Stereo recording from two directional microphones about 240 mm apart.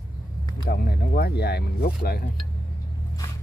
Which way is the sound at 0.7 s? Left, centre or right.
Left.